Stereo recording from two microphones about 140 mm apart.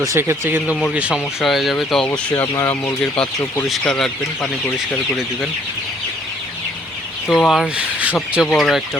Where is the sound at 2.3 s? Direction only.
20° left (ahead or behind); by 5.5 s centre (ahead or behind).